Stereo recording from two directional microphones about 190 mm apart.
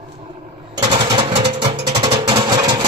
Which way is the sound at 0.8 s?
25° right (ahead or behind).